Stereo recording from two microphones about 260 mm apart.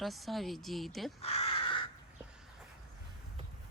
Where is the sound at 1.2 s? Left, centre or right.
Left.